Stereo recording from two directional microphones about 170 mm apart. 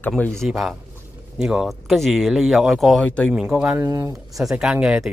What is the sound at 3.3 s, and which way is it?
Speech, 5° right (ahead or behind).